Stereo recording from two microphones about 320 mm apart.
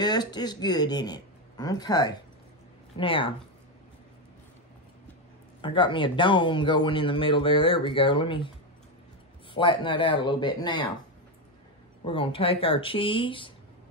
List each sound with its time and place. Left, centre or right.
0.0 s speech: centre
5.6 s speech: centre
9.5 s speech: centre
12.0 s speech: centre